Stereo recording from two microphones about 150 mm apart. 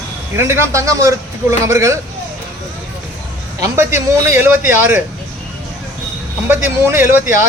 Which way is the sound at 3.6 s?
20° right (ahead or behind).